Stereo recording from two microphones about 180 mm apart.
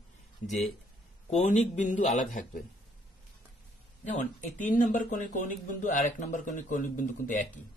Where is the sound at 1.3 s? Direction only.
40° left (ahead or behind).